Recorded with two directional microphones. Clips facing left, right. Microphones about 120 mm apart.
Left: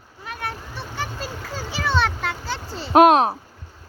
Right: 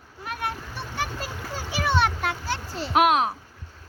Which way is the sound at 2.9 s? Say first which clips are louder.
Left 7 dB; 35° left (ahead or behind).